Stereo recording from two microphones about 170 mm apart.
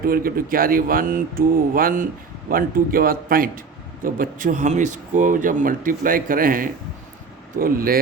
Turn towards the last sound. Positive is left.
turn(degrees=-60)  # may be behind; listen again after turning